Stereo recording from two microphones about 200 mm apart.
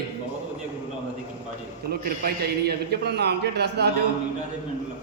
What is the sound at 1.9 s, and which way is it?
A man's voice, 50° right (ahead or behind).